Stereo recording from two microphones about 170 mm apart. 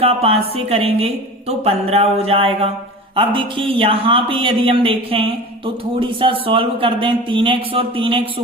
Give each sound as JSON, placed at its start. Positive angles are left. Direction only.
{"t": 0.0, "sound": "a man's voice", "side_deg": -35}